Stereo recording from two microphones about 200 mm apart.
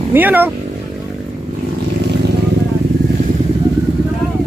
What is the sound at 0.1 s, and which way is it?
Speech, 10° right (ahead or behind).